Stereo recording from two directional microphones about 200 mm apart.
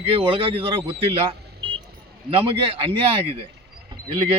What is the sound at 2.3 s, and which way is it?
Speech, 30° right (ahead or behind).